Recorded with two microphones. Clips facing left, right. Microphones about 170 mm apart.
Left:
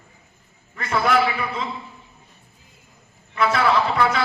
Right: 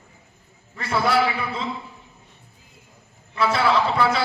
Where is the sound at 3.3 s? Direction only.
30° right (ahead or behind).